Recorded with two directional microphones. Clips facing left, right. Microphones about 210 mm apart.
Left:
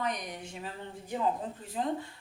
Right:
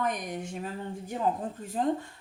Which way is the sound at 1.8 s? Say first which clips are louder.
Right 5 dB; 50° right (ahead or behind).